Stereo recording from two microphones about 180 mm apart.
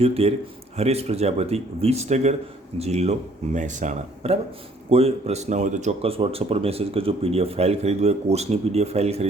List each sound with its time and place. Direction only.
0.0 s speech: 35° right (ahead or behind)